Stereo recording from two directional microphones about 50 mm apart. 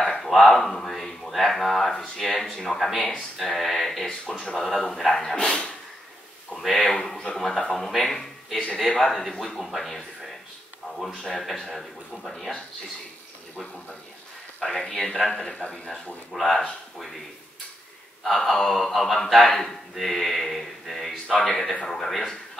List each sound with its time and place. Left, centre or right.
0.1 s speech: centre
5.3 s speech: centre
6.5 s speech: centre
7.0 s speech: centre
11.1 s speech: centre
14.6 s speech: centre
16.3 s speech: centre
18.2 s speech: centre